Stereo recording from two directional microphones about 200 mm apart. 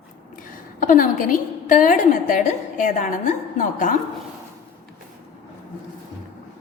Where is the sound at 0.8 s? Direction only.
40° left (ahead or behind).